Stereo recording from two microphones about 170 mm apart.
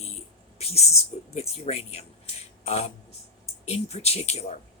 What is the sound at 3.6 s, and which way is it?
Speech, 40° left (ahead or behind).